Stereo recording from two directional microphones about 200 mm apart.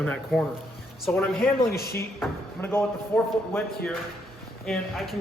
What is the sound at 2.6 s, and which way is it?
Speech, 10° left (ahead or behind).